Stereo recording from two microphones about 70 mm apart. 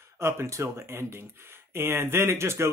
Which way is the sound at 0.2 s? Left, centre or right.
Right.